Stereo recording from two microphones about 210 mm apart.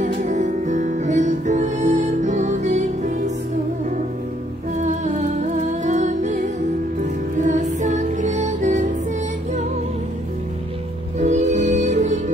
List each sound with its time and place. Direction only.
0.0 s music: 35° right (ahead or behind)
4.7 s music: 35° right (ahead or behind)
11.1 s music: 35° right (ahead or behind)